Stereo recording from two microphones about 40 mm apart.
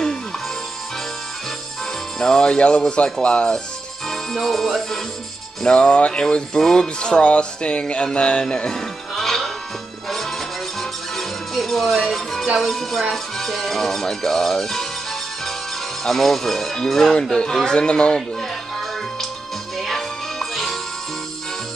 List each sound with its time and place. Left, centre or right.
2.1 s music: centre
4.1 s music: centre
5.6 s music: left
9.1 s music: centre
16.0 s music: centre; by 18.2 s left
19.8 s music: centre